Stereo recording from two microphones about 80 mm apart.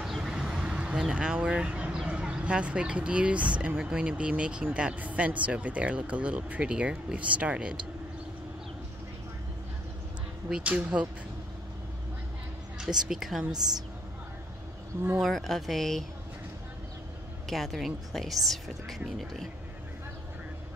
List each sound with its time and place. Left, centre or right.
0.0 s vehicle: centre
2.0 s speech: centre
10.5 s speech: centre
12.7 s a sound: centre
13.1 s speech: centre
15.2 s speech: centre
17.5 s speech: centre